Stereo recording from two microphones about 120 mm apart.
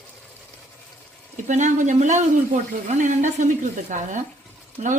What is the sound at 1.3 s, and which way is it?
Speech, 90° right.